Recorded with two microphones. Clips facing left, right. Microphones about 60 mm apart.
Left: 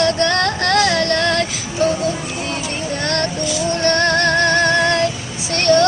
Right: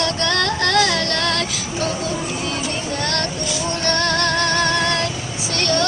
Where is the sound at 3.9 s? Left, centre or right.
Left.